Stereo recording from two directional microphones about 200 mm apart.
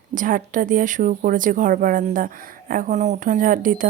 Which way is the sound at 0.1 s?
40° right (ahead or behind).